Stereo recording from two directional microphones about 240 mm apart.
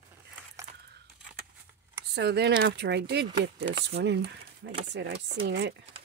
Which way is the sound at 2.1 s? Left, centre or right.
Right.